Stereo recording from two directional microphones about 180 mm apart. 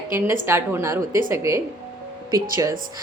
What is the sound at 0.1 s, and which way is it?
A woman's voice, 15° right (ahead or behind).